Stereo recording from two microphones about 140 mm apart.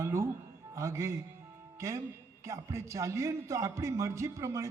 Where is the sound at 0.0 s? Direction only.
20° right (ahead or behind).